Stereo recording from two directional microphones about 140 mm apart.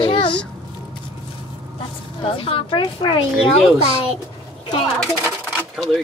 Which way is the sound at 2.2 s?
40° left (ahead or behind).